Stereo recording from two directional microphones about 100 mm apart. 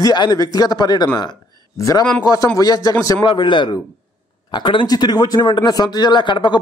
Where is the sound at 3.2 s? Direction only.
50° left (ahead or behind).